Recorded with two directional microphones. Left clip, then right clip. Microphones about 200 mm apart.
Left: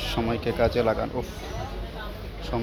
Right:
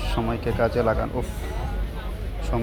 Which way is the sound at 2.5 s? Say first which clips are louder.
Right 2 dB; 10° left (ahead or behind).